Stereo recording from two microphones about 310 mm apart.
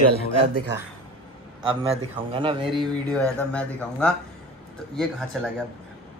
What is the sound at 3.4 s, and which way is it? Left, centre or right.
Speech, centre.